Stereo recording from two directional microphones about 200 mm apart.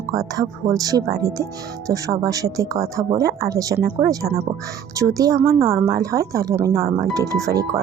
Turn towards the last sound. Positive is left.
turn(degrees=-15)  # may be behind; listen again after turning